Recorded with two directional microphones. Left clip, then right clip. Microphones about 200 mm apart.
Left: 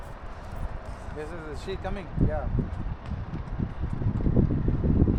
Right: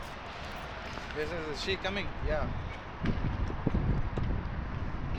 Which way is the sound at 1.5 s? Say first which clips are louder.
Right 2 dB; 60° left (ahead or behind).